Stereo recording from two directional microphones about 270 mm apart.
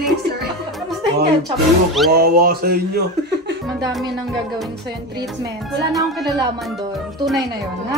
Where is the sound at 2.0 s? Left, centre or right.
Right.